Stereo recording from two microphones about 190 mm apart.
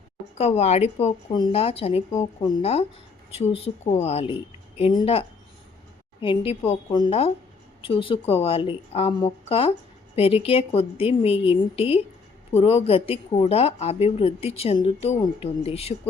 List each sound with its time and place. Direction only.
0.3 s a woman's voice: 35° left (ahead or behind)
6.2 s a woman's voice: 30° left (ahead or behind)